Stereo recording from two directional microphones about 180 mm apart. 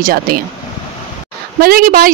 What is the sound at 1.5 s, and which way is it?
Speech, 55° right (ahead or behind).